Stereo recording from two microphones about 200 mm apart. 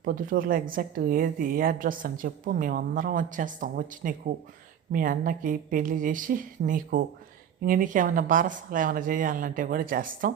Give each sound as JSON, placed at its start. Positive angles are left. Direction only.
{"t": 0.0, "sound": "a woman's voice", "side_deg": -45}